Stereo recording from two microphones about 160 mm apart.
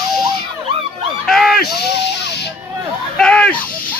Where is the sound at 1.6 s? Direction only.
85° left.